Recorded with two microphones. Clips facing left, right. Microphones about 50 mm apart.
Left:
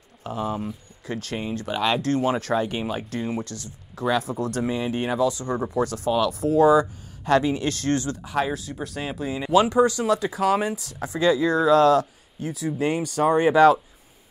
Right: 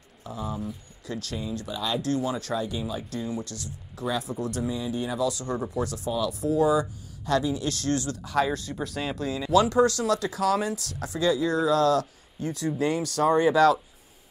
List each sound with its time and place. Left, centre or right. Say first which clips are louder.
0.2 s speech: left 5 dB; left
1.0 s speech: left 4 dB; left
1.7 s speech: left 8 dB; left
2.0 s speech: left 3 dB; left
2.4 s speech: left 5 dB; left
3.4 s speech: left 1 dB; left
5.3 s speech: left 3 dB; left
5.8 s speech: left 5 dB; left
6.0 s speech: left 4 dB; left
8.2 s speech: even; centre
8.5 s speech: even; centre; by 12.0 s left
12.4 s speech: left 1 dB; centre
12.8 s speech: left 2 dB; left